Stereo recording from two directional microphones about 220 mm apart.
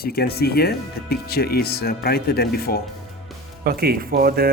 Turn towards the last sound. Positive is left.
turn(degrees=-45)  # may be behind; listen again after turning